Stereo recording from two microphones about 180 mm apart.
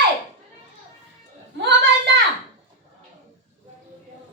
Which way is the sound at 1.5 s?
75° right (ahead or behind).